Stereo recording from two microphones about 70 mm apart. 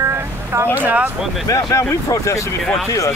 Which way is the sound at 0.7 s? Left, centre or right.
Right.